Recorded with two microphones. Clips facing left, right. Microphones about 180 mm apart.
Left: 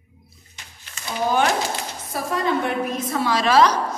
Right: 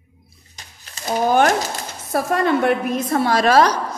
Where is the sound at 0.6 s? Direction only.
40° right (ahead or behind).